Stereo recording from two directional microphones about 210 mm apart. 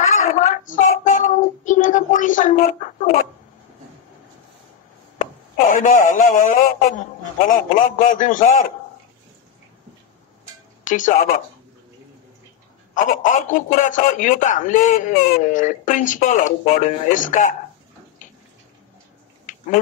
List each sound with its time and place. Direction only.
0.0 s a sound: 35° left (ahead or behind)
1.1 s a child's voice: 35° left (ahead or behind)
5.2 s a man's voice: 40° left (ahead or behind)
10.8 s speech: 40° left (ahead or behind)
12.9 s a man's voice: 40° left (ahead or behind)
18.2 s bathtub: 40° left (ahead or behind)
19.5 s a sound: 40° left (ahead or behind)